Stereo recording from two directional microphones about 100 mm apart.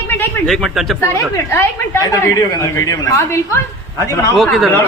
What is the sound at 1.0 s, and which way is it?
A woman's voice, 25° left (ahead or behind).